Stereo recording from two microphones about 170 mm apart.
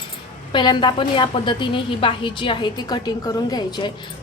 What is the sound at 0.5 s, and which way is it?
A woman's voice, 25° left (ahead or behind).